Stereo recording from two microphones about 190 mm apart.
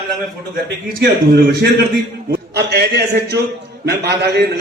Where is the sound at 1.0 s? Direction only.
60° right (ahead or behind).